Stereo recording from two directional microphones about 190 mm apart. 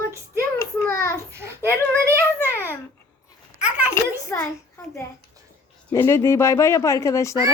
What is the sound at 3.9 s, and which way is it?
Speech, 15° left (ahead or behind).